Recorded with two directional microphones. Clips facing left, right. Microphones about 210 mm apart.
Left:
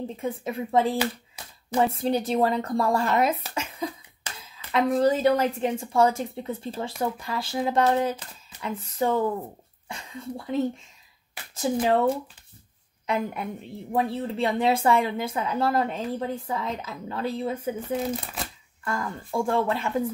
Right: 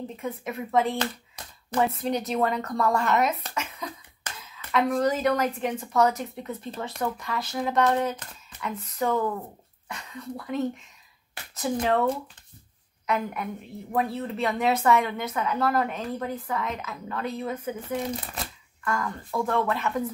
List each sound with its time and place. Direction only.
0.2 s speech: 30° left (ahead or behind)
0.9 s a sound: 10° left (ahead or behind)
1.8 s speech: 30° left (ahead or behind)
3.5 s a sound: 30° left (ahead or behind)
4.7 s speech: 30° left (ahead or behind)
11.8 s speech: 25° left (ahead or behind)
17.9 s speech: centre (ahead or behind)
18.9 s speech: 30° left (ahead or behind)